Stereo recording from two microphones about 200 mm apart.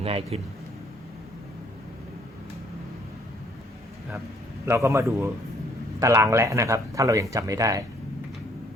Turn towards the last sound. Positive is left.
turn(degrees=-15)  # may be behind; listen again after turning